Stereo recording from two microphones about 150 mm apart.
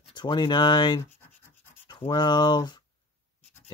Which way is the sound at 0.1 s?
30° left (ahead or behind).